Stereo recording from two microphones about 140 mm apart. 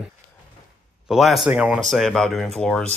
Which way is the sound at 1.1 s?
Centre (ahead or behind).